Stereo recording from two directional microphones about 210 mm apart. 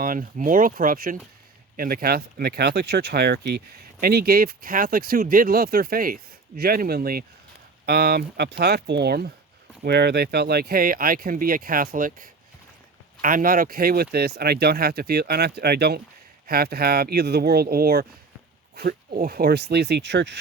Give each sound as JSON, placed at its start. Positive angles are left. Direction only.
{"t": 0.0, "sound": "speech", "side_deg": -40}